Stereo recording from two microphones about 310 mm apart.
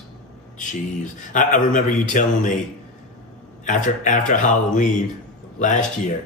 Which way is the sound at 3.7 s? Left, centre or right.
Left.